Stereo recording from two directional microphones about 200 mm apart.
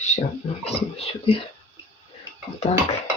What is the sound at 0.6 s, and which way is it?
Speech, 30° left (ahead or behind).